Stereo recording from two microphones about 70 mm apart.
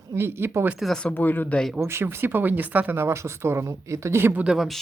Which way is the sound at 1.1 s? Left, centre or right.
Left.